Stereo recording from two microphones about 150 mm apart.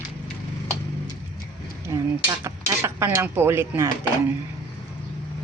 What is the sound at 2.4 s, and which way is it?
Speech, 15° right (ahead or behind).